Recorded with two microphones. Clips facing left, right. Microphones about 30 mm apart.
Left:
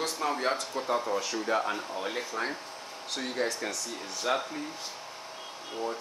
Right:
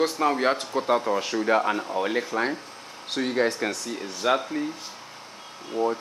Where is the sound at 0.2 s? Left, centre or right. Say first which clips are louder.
Right 7 dB; right.